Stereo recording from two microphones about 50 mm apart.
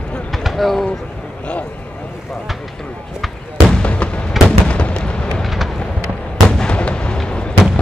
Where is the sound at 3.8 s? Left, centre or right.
Left.